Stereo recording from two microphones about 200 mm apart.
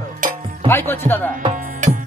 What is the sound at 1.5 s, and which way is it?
Music, 40° right (ahead or behind).